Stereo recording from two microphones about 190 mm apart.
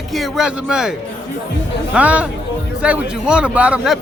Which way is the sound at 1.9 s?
5° right (ahead or behind).